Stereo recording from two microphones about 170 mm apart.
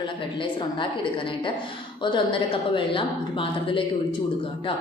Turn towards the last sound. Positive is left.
turn(degrees=30)  # may be behind; listen again after turning